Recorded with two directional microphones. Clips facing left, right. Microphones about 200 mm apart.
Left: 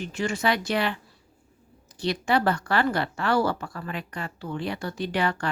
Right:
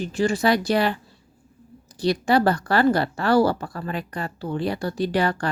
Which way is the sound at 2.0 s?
35° right (ahead or behind).